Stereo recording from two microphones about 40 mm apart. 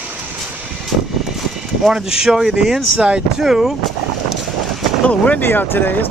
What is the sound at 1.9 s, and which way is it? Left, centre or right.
Speech, centre.